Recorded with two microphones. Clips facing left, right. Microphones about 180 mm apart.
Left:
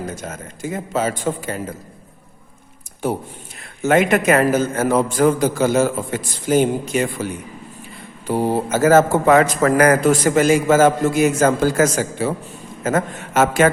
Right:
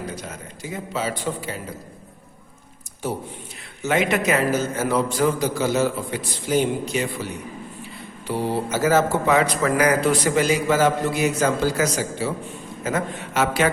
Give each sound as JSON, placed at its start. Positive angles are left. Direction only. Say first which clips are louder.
{"t": 0.0, "sound": "a man's voice", "louder": "left 4 dB", "side_deg": 45}
{"t": 3.8, "sound": "a man's voice", "louder": "left 6 dB", "side_deg": 50}
{"t": 8.3, "sound": "a man's voice", "louder": "left 5 dB", "side_deg": 45}